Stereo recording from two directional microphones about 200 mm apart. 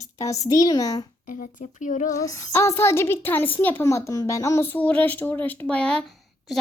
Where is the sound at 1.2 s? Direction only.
40° left (ahead or behind).